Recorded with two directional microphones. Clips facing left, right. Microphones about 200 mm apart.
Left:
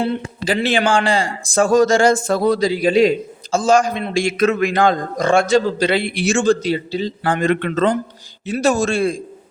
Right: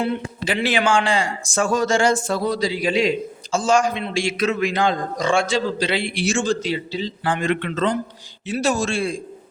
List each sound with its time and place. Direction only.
0.0 s speech: 35° left (ahead or behind); by 6.6 s 55° left (ahead or behind)
6.6 s speech: 40° left (ahead or behind)